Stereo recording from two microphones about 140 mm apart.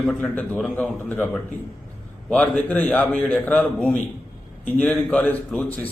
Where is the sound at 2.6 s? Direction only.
10° left (ahead or behind).